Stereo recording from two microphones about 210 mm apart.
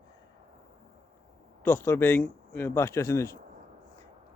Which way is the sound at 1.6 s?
10° left (ahead or behind).